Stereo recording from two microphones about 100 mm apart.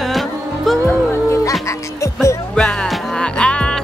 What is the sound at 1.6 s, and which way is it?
Music, 30° left (ahead or behind).